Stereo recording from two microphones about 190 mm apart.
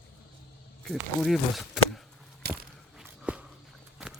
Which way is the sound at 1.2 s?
Centre (ahead or behind).